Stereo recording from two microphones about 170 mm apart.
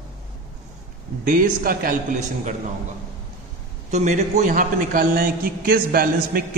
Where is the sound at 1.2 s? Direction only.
55° right (ahead or behind).